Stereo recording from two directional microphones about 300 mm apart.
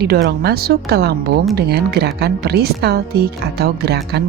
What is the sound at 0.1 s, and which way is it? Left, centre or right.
A woman's voice, right.